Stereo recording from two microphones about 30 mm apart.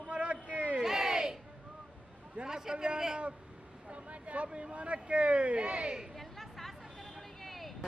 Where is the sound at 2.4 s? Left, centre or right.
Right.